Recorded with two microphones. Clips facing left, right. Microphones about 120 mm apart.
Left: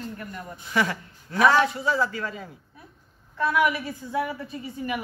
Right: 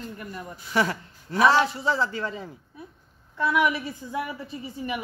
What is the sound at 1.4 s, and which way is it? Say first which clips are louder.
A man's voice: even; 30° right (ahead or behind).